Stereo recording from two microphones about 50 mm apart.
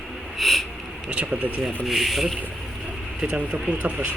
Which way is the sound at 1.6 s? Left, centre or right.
Centre.